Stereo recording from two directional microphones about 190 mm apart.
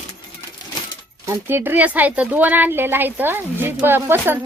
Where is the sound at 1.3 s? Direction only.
10° right (ahead or behind).